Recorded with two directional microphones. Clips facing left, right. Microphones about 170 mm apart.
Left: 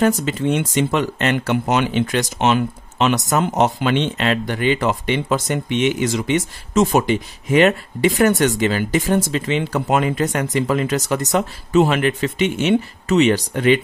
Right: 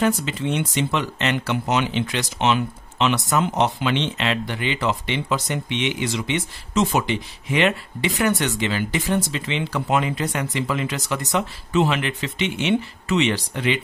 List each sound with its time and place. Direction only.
0.0 s speech: 45° left (ahead or behind)